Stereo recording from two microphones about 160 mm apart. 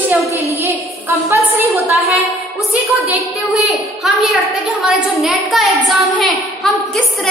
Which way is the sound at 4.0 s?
Centre (ahead or behind).